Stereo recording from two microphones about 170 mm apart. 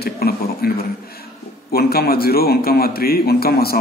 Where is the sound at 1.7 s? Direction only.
65° left (ahead or behind).